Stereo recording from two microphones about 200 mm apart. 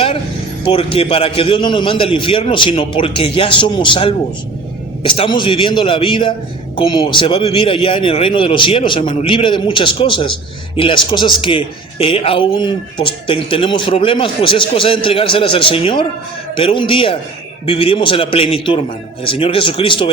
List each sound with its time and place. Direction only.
0.6 s a man's voice: 30° left (ahead or behind)